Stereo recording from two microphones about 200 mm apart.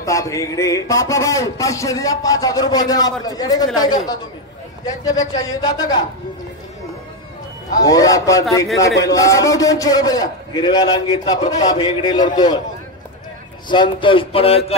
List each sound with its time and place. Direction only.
0.0 s a man's voice: 15° left (ahead or behind)
5.3 s a man's voice: 20° left (ahead or behind)
7.7 s a man's voice: 20° left (ahead or behind)
13.7 s a man's voice: 25° left (ahead or behind)